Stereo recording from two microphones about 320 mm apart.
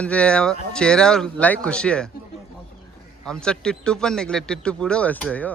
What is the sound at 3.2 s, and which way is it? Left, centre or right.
Speech, centre.